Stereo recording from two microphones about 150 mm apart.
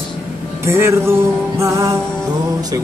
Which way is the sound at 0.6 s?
15° right (ahead or behind).